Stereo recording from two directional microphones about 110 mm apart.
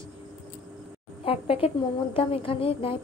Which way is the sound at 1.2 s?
60° left (ahead or behind).